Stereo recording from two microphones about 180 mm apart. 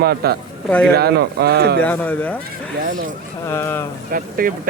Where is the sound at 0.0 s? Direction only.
60° right (ahead or behind).